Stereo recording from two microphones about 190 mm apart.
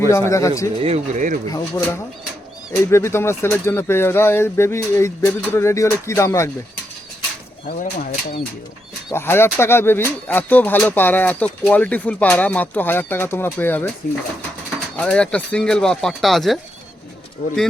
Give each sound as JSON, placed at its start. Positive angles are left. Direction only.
{"t": 0.1, "sound": "speech", "side_deg": 15}
{"t": 0.8, "sound": "speech", "side_deg": -35}
{"t": 1.5, "sound": "speech", "side_deg": 20}
{"t": 7.7, "sound": "speech", "side_deg": 50}
{"t": 9.1, "sound": "speech", "side_deg": 10}
{"t": 14.9, "sound": "speech", "side_deg": 5}
{"t": 17.4, "sound": "speech", "side_deg": 50}